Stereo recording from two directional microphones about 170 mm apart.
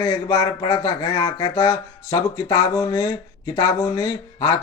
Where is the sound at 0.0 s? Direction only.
20° left (ahead or behind).